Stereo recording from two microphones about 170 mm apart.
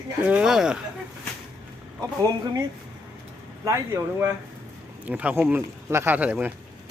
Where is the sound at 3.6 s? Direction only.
20° right (ahead or behind).